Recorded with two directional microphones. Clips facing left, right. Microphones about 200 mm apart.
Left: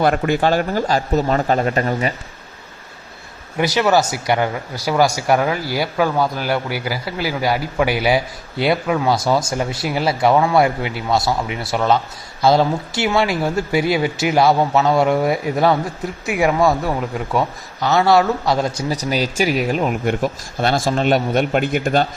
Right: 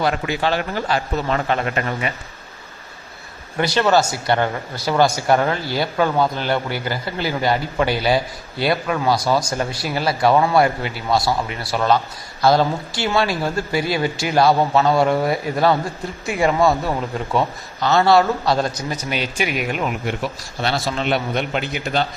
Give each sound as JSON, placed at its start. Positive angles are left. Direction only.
{"t": 0.0, "sound": "speech", "side_deg": 50}
{"t": 3.6, "sound": "speech", "side_deg": 10}
{"t": 9.0, "sound": "speech", "side_deg": 20}
{"t": 14.6, "sound": "speech", "side_deg": 5}
{"t": 17.7, "sound": "speech", "side_deg": 15}
{"t": 18.8, "sound": "speech", "side_deg": 35}
{"t": 20.1, "sound": "a man's voice", "side_deg": 50}